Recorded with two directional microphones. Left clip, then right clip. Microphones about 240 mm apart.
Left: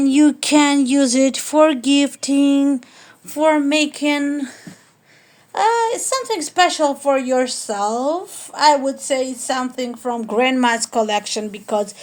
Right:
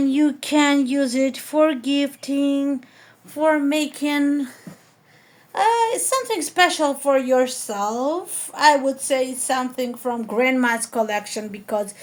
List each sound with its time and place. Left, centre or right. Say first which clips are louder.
0.0 s speech: left 5 dB; left